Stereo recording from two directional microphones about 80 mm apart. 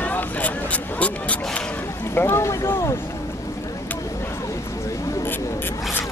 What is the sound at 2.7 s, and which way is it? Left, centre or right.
Vehicle, left.